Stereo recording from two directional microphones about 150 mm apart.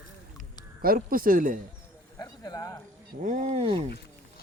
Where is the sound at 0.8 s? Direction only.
75° right (ahead or behind).